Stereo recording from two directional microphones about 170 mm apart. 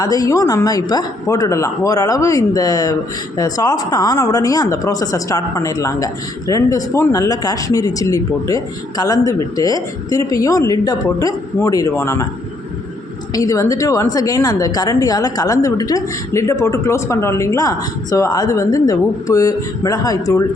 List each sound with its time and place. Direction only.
0.0 s a woman's voice: 20° left (ahead or behind)
13.3 s a woman's voice: 20° left (ahead or behind)